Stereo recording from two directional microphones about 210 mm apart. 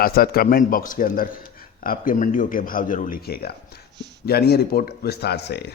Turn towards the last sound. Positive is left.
turn(degrees=50)  # may be behind; listen again after turning